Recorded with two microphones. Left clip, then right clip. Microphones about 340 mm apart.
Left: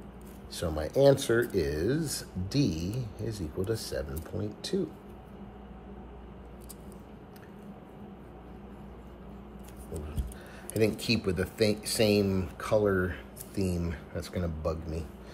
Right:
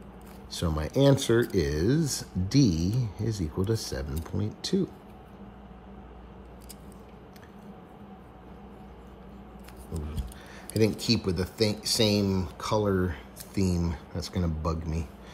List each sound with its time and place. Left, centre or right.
0.5 s speech: right
10.8 s speech: centre